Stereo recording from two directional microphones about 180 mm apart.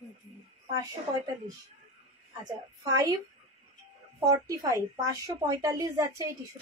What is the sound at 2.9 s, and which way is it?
Speech, 20° right (ahead or behind).